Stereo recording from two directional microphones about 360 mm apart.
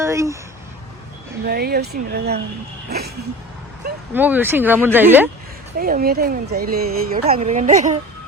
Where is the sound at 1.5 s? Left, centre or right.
Right.